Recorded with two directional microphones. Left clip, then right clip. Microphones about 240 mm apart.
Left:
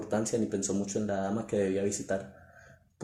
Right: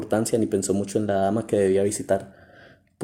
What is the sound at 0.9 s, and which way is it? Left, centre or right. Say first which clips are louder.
Speech: right 11 dB; right.